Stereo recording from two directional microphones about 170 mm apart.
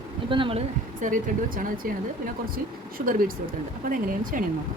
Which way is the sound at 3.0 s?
55° right (ahead or behind).